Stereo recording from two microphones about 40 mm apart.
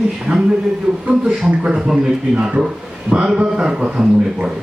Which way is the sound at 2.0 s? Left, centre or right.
Right.